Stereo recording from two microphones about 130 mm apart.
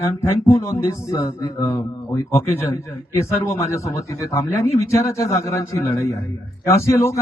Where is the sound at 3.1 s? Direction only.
25° left (ahead or behind).